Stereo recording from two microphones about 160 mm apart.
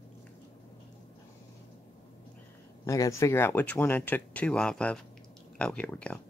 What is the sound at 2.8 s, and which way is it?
Speech, 20° left (ahead or behind).